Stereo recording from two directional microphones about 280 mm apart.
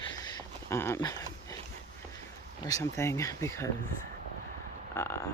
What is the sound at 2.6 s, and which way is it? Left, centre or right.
Speech, centre.